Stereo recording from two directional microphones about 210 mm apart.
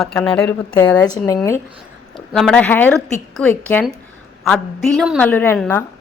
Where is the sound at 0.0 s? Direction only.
5° left (ahead or behind).